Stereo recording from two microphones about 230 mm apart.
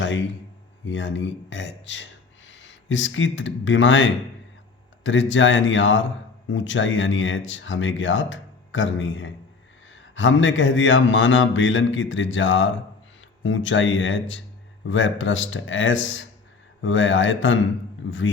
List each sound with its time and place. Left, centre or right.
0.0 s speech: left